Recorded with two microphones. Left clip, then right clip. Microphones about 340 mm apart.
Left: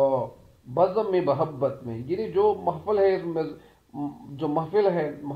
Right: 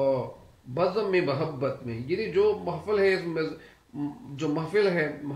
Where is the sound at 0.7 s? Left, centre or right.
Centre.